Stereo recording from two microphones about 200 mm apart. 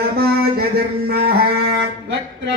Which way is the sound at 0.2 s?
50° right (ahead or behind).